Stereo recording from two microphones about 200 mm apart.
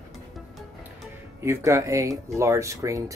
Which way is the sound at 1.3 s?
10° right (ahead or behind).